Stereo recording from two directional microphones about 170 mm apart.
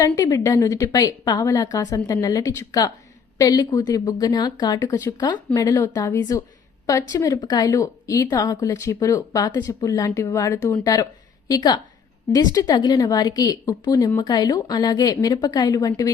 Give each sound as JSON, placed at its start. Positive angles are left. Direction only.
{"t": 0.0, "sound": "speech", "side_deg": 20}